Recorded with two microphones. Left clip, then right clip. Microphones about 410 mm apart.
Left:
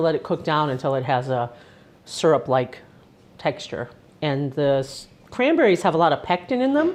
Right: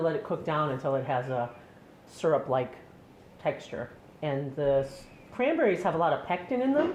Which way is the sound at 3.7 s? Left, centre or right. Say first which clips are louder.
Left 7 dB; left.